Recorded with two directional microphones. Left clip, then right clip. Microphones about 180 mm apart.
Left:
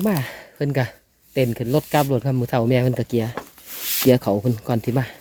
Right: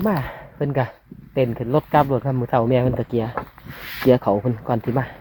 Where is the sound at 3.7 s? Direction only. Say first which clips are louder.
Left 8 dB; 90° left.